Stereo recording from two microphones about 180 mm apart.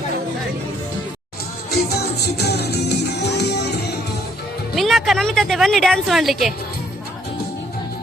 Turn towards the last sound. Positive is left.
turn(degrees=0)  # may be behind; listen again after turning